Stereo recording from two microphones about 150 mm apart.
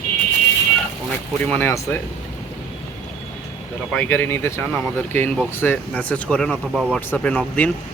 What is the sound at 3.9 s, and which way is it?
Speech, 10° left (ahead or behind).